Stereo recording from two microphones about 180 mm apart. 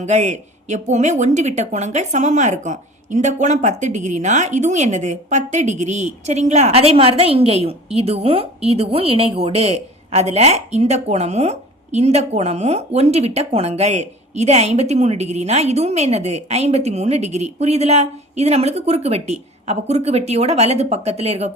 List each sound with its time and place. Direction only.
0.0 s a woman's voice: 40° right (ahead or behind)